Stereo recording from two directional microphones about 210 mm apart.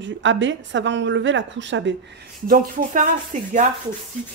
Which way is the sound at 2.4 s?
40° right (ahead or behind).